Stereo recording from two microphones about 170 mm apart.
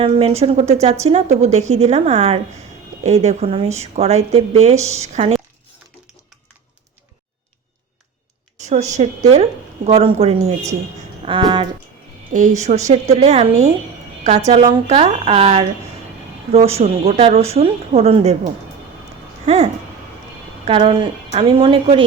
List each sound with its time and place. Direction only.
0.0 s speech: 35° right (ahead or behind)
8.6 s a woman's voice: 45° right (ahead or behind)
11.3 s a sound: 30° right (ahead or behind)
12.3 s a woman's voice: 45° right (ahead or behind)
20.7 s speech: 30° right (ahead or behind)